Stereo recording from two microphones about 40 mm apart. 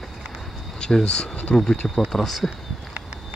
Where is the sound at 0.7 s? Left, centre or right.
Centre.